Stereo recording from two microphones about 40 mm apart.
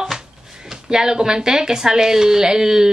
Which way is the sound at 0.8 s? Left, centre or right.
Centre.